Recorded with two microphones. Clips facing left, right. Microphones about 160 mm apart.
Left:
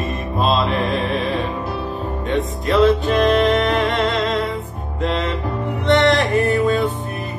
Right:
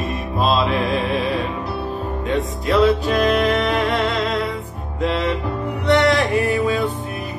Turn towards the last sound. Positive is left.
turn(degrees=0)  # may be behind; listen again after turning